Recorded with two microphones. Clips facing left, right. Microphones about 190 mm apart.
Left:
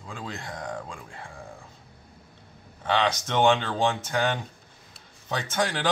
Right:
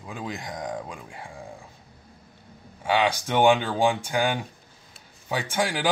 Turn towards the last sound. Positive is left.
turn(degrees=-10)  # may be behind; listen again after turning